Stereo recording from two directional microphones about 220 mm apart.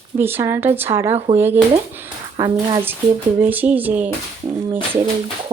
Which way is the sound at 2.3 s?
25° right (ahead or behind).